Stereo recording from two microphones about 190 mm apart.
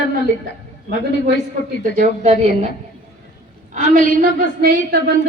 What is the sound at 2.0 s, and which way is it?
Speech, 35° right (ahead or behind).